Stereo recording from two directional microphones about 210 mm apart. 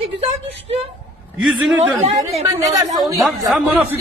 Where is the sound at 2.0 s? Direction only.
30° right (ahead or behind).